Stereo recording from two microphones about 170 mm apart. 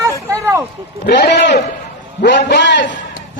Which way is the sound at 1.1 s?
90° left.